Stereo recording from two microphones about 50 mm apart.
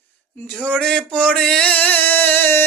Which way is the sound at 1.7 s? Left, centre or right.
Left.